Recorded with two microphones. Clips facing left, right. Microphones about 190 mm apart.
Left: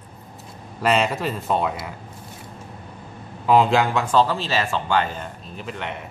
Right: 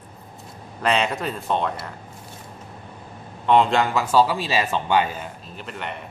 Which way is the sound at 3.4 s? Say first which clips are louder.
Left 1 dB; centre (ahead or behind).